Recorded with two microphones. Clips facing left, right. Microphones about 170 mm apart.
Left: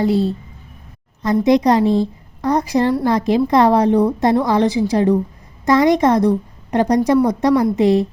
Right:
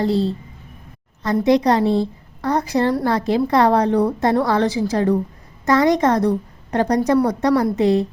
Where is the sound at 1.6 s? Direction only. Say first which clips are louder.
Left 2 dB; 15° left (ahead or behind).